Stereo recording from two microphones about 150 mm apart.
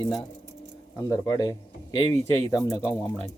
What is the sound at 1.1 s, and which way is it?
Speech, 25° left (ahead or behind).